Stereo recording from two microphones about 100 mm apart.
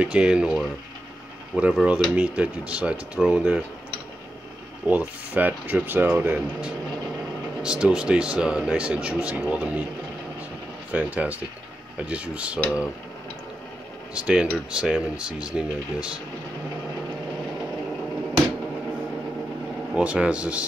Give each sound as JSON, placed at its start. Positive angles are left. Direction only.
{"t": 0.0, "sound": "speech", "side_deg": -10}
{"t": 4.8, "sound": "speech", "side_deg": -15}
{"t": 10.9, "sound": "speech", "side_deg": -15}
{"t": 14.1, "sound": "speech", "side_deg": -10}
{"t": 19.9, "sound": "speech", "side_deg": -10}